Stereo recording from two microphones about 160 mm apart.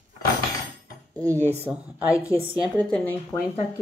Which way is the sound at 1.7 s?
15° right (ahead or behind).